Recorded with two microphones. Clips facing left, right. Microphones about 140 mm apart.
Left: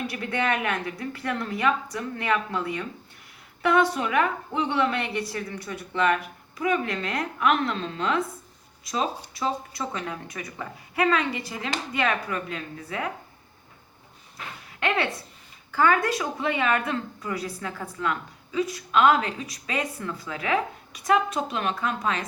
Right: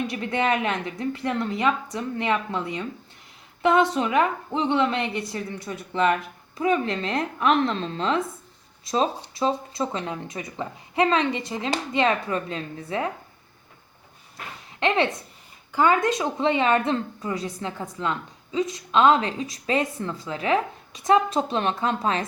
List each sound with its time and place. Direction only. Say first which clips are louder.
0.1 s a woman's voice: right 3 dB; 25° right (ahead or behind)
14.8 s a woman's voice: right 4 dB; 25° right (ahead or behind)